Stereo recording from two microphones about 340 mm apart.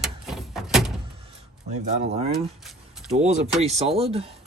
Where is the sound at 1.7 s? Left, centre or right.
Centre.